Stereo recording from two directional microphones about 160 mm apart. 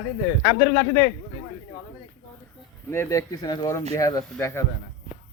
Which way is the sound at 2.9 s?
20° left (ahead or behind).